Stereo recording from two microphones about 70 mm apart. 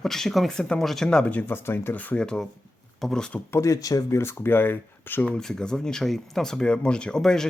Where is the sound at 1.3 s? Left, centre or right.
Left.